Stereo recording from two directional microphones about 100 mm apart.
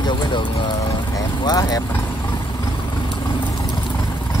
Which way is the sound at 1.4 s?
40° left (ahead or behind).